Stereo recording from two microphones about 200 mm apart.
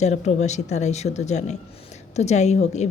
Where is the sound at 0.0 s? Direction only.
35° left (ahead or behind).